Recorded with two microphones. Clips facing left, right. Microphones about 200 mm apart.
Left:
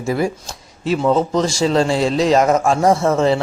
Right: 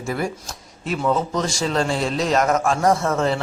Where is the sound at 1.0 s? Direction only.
30° left (ahead or behind).